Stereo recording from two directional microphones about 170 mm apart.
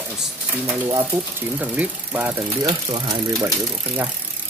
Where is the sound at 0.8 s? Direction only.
10° right (ahead or behind).